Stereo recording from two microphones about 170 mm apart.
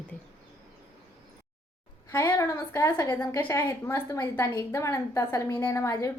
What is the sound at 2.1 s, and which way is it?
A woman's voice, 15° left (ahead or behind).